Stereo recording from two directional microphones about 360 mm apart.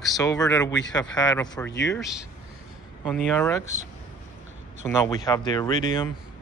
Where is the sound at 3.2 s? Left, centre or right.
Centre.